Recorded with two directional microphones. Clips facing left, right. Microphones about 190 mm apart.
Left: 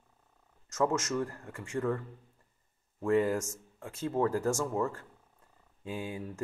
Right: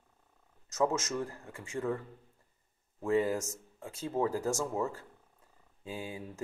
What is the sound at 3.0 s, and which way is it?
Speech, 15° right (ahead or behind).